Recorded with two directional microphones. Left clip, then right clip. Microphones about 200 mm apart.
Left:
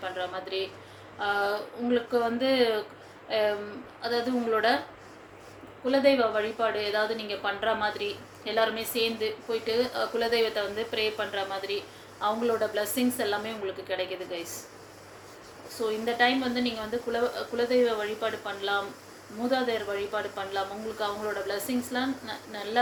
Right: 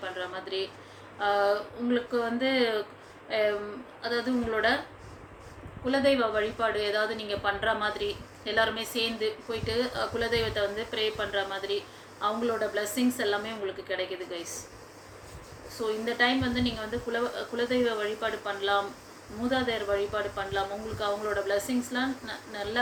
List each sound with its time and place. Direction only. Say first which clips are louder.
0.0 s a sound: left 2 dB; 15° left (ahead or behind)
1.2 s a woman's voice: right 2 dB; 15° left (ahead or behind)
5.8 s a woman's voice: left 2 dB; 15° left (ahead or behind)
15.8 s a woman's voice: left 2 dB; 15° left (ahead or behind)